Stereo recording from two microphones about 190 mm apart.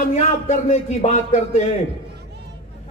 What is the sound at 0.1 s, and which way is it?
A man's voice, 35° left (ahead or behind).